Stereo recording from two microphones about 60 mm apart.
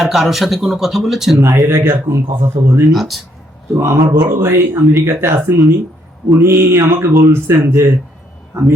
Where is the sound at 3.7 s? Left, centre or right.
Right.